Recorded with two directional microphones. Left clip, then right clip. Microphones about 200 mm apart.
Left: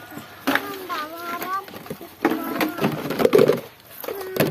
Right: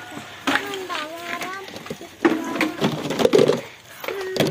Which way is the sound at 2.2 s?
25° left (ahead or behind).